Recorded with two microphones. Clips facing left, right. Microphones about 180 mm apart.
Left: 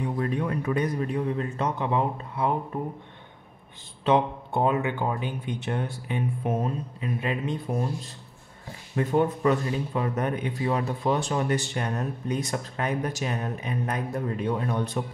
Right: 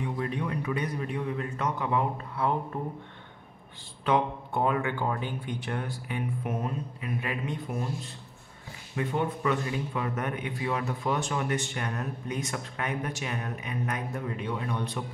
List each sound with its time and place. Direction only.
0.0 s a man's voice: 45° left (ahead or behind); by 2.8 s 20° left (ahead or behind)
4.0 s speech: 25° left (ahead or behind)
8.9 s a man's voice: 45° left (ahead or behind)